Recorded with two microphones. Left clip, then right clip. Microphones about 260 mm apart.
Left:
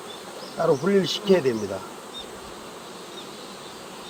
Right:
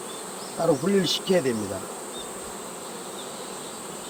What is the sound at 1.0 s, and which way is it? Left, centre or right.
Speech, centre.